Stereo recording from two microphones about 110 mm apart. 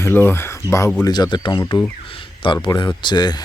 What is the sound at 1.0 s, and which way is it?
Speech, 40° left (ahead or behind).